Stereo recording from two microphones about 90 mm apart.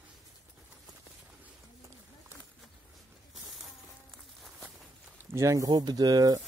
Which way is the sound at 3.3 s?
Centre (ahead or behind).